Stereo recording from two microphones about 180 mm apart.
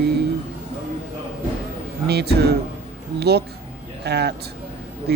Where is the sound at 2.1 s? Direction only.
65° right (ahead or behind).